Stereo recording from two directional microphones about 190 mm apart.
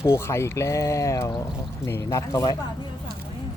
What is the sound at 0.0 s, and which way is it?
Speech, 15° left (ahead or behind).